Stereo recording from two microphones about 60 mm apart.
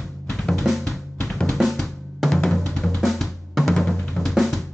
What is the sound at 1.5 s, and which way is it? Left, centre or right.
Drum, centre.